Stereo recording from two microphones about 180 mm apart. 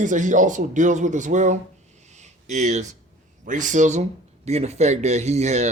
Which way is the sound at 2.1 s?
40° right (ahead or behind).